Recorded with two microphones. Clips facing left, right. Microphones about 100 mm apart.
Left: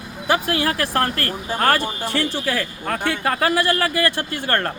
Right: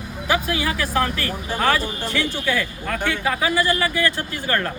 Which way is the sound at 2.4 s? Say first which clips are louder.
Even; 35° left (ahead or behind).